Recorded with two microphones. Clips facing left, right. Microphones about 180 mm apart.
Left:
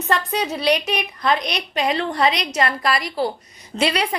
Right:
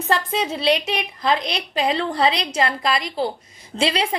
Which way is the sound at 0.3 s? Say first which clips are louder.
Even; 25° right (ahead or behind).